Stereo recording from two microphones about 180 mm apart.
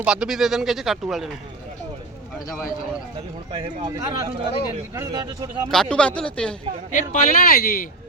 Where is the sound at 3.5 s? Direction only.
30° right (ahead or behind).